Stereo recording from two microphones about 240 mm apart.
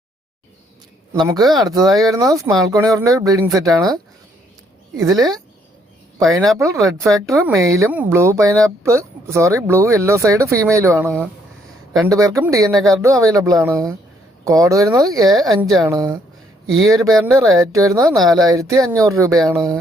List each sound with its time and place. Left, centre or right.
1.1 s speech: centre
5.0 s speech: centre
6.3 s speech: centre